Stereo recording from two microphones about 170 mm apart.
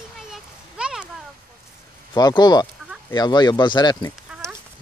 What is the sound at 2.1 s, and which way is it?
Speech, 25° left (ahead or behind).